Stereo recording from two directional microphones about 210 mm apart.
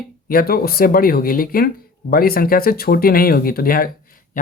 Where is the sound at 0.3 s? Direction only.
45° left (ahead or behind).